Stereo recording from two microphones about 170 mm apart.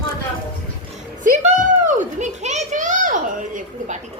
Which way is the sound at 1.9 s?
45° right (ahead or behind).